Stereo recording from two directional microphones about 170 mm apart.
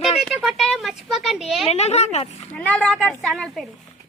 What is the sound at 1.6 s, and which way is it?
Speech, 40° left (ahead or behind).